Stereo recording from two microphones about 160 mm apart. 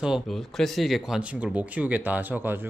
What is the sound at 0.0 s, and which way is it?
Speech, centre (ahead or behind).